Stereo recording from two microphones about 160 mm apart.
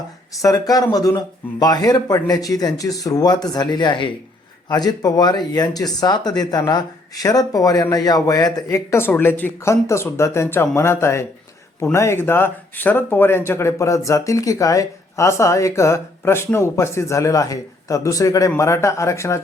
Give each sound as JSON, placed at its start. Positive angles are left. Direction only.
{"t": 0.3, "sound": "speech", "side_deg": 20}